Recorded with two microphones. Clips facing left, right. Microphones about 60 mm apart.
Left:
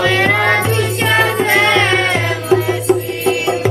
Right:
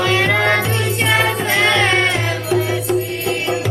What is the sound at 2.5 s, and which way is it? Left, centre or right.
Music, left.